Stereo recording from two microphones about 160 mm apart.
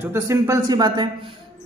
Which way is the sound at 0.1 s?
20° right (ahead or behind).